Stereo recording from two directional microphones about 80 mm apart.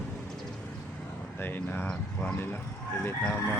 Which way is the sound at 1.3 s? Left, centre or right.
Left.